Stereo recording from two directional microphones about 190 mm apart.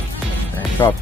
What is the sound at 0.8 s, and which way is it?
Speech, 15° left (ahead or behind).